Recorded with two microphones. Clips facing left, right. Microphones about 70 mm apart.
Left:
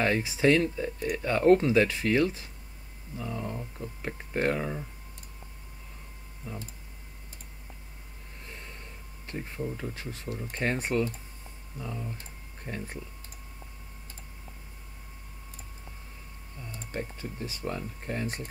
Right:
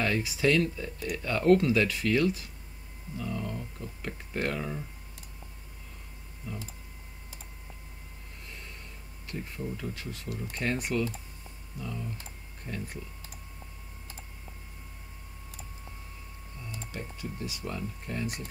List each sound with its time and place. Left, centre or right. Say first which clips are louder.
0.0 s speech: left 3 dB; left
6.5 s speech: even; left
8.5 s a sound: left 2 dB; left
9.3 s speech: left 2 dB; left
16.9 s speech: left 5 dB; left